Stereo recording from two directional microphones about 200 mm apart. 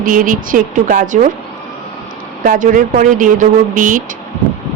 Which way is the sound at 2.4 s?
40° right (ahead or behind).